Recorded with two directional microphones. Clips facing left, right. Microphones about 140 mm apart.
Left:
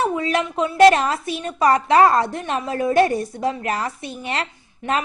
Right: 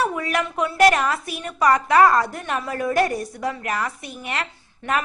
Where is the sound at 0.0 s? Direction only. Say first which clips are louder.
Left 2 dB; 25° left (ahead or behind).